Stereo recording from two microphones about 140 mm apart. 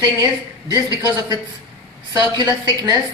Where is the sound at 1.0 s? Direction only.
25° right (ahead or behind).